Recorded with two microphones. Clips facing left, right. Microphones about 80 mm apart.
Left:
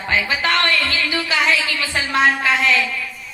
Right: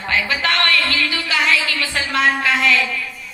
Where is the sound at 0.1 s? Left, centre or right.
Centre.